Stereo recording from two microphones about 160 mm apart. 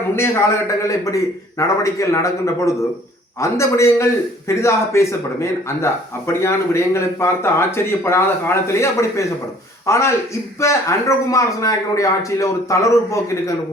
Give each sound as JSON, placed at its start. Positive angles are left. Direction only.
{"t": 0.9, "sound": "a man's voice", "side_deg": 20}